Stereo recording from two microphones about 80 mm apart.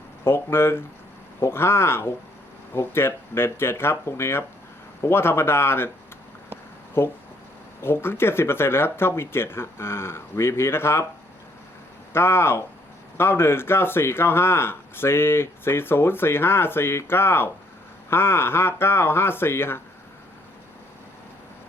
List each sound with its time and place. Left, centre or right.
0.3 s speech: left
7.0 s speech: left
12.1 s speech: left